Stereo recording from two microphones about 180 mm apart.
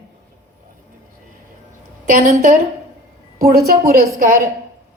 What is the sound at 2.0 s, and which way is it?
A woman's voice, 45° right (ahead or behind).